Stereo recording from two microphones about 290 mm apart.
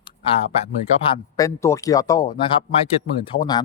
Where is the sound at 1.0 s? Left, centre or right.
Centre.